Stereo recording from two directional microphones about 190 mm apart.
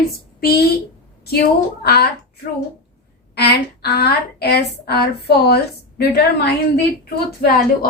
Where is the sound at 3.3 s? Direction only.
55° left (ahead or behind).